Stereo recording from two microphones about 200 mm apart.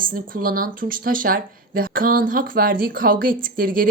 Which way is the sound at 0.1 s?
45° right (ahead or behind).